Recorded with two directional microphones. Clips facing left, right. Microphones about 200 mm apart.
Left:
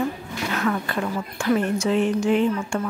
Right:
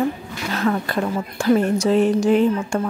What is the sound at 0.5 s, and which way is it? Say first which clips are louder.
A woman's voice: right 4 dB; 35° right (ahead or behind).